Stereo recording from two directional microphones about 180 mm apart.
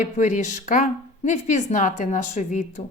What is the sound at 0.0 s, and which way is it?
A woman's voice, 45° left (ahead or behind).